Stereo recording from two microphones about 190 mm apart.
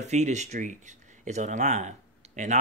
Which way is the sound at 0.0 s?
35° right (ahead or behind).